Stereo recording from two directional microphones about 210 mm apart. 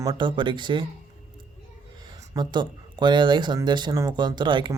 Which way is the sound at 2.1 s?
20° right (ahead or behind).